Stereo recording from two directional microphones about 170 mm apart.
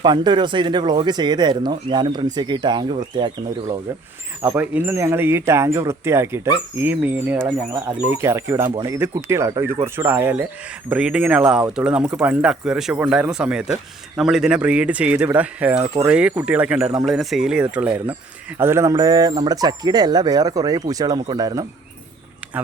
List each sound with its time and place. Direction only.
0.0 s speech: 25° right (ahead or behind)
4.5 s speech: 10° right (ahead or behind)